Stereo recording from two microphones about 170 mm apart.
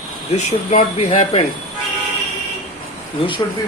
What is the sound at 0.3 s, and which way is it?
Speech, 40° left (ahead or behind).